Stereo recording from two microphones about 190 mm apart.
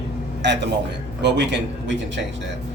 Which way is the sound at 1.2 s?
65° right (ahead or behind).